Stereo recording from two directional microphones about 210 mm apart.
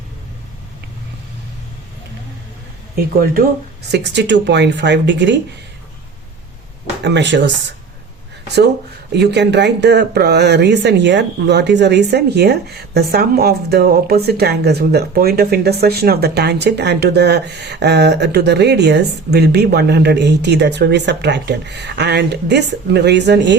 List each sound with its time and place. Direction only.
3.0 s speech: 45° right (ahead or behind)
7.0 s speech: 55° right (ahead or behind)